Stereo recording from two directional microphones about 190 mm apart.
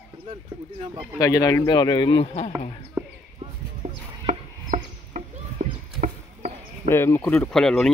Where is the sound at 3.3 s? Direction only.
35° right (ahead or behind).